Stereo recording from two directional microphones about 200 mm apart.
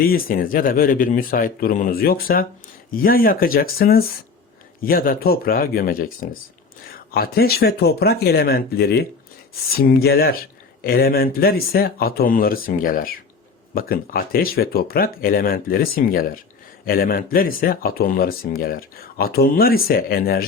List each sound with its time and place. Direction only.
0.0 s speech: 45° left (ahead or behind)